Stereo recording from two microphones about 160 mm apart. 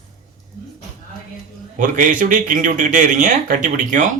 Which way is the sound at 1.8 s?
55° right (ahead or behind).